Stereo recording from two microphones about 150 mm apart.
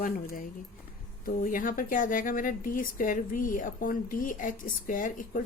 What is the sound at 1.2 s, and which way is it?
Speech, 65° left (ahead or behind).